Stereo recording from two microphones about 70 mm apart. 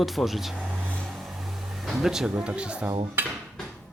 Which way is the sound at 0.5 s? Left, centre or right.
Centre.